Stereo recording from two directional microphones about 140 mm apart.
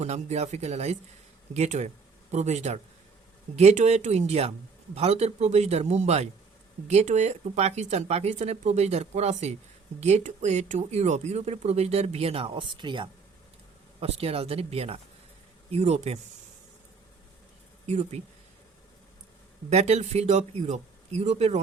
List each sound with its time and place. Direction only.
0.0 s speech: 50° right (ahead or behind)
17.8 s speech: 50° right (ahead or behind)
19.7 s speech: 50° right (ahead or behind)